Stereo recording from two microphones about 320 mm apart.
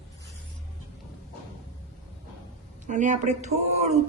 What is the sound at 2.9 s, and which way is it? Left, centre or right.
Speech, right.